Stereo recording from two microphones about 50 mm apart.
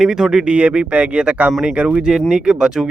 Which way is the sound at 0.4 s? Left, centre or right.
Right.